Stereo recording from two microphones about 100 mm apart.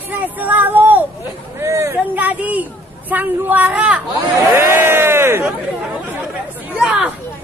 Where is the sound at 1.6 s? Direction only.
30° right (ahead or behind).